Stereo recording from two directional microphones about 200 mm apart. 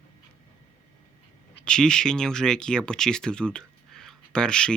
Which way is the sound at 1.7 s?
5° left (ahead or behind).